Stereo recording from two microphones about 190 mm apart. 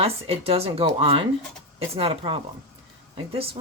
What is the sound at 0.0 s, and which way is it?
Speech, 30° right (ahead or behind).